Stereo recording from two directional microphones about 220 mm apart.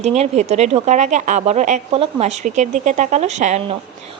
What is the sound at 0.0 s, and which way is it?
A woman's voice, 30° right (ahead or behind).